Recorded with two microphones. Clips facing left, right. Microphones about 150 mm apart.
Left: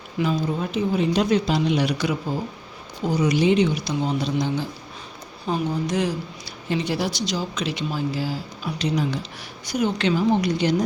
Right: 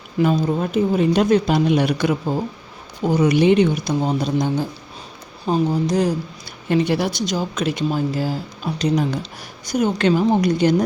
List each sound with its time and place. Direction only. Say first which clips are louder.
0.2 s a woman's voice: right 5 dB; 50° right (ahead or behind)
6.7 s a woman's voice: right 6 dB; 55° right (ahead or behind)